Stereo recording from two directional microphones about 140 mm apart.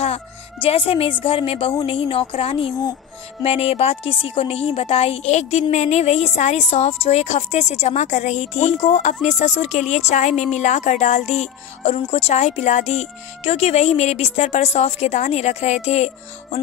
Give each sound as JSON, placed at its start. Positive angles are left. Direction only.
{"t": 0.0, "sound": "a woman's voice", "side_deg": 45}